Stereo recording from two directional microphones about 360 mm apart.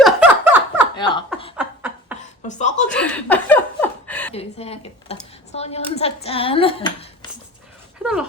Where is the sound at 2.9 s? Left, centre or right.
Centre.